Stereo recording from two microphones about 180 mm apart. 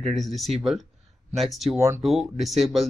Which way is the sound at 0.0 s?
Centre (ahead or behind).